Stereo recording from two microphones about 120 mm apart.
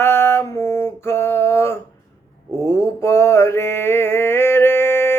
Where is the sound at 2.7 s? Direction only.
20° left (ahead or behind).